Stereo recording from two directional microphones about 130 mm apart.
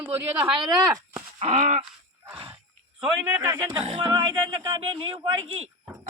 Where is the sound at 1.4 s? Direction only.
60° right (ahead or behind).